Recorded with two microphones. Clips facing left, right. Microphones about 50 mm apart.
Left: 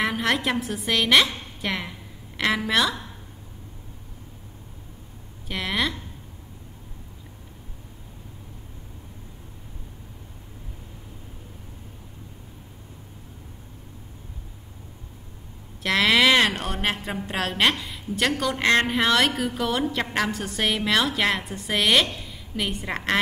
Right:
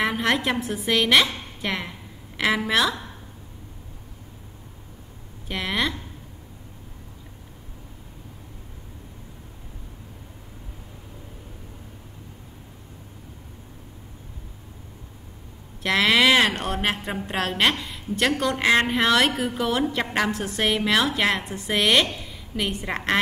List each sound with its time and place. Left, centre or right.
0.0 s a woman's voice: centre
5.5 s a woman's voice: centre
15.8 s a woman's voice: centre